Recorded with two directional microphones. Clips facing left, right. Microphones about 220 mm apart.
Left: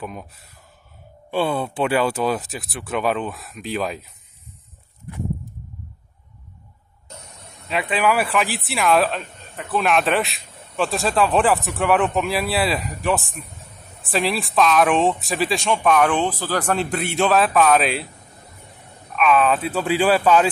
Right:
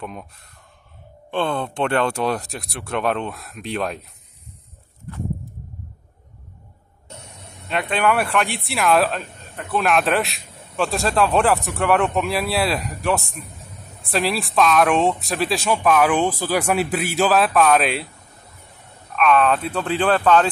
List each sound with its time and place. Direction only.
0.0 s speech: 5° left (ahead or behind)
5.1 s a sound: 15° left (ahead or behind)
7.6 s speech: centre (ahead or behind)
19.1 s speech: centre (ahead or behind)